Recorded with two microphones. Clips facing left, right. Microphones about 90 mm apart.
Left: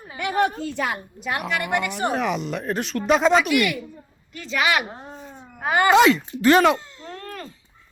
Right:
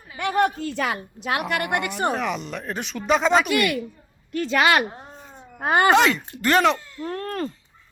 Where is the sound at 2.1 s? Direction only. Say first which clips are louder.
Left 2 dB; centre (ahead or behind).